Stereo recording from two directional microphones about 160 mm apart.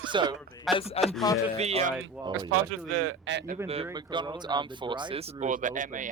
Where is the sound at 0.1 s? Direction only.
30° right (ahead or behind).